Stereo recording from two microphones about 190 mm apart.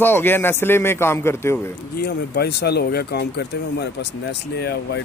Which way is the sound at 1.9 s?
60° left (ahead or behind).